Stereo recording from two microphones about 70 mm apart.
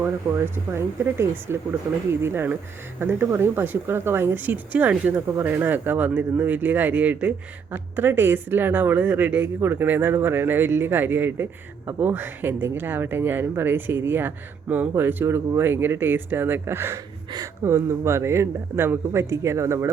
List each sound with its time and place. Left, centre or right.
0.0 s speech: right